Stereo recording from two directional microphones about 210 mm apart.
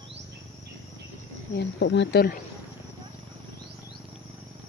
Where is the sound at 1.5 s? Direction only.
55° left (ahead or behind).